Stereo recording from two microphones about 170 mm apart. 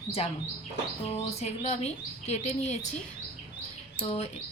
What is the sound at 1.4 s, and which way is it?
Speech, 40° left (ahead or behind).